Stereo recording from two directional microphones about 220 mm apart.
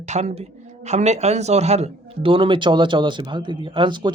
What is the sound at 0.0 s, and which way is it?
Speech, 30° right (ahead or behind).